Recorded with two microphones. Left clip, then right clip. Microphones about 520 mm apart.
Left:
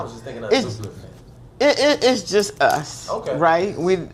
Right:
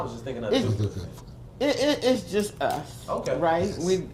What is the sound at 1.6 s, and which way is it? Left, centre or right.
Speech, left.